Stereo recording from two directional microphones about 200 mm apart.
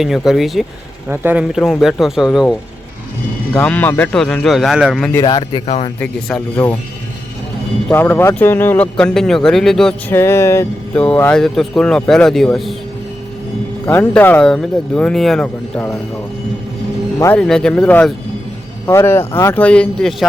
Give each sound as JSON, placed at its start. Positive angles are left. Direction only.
{"t": 0.0, "sound": "speech", "side_deg": 0}
{"t": 5.2, "sound": "speech", "side_deg": 20}
{"t": 6.0, "sound": "speech", "side_deg": 5}
{"t": 7.9, "sound": "speech", "side_deg": 10}
{"t": 13.8, "sound": "speech", "side_deg": 10}
{"t": 17.2, "sound": "speech", "side_deg": 10}